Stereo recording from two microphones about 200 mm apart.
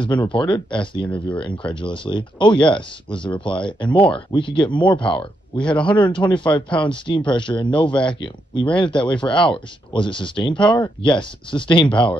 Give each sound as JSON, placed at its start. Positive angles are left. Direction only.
{"t": 0.3, "sound": "speech", "side_deg": 25}